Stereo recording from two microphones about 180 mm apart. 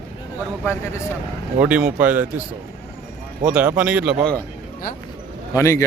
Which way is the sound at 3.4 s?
10° right (ahead or behind).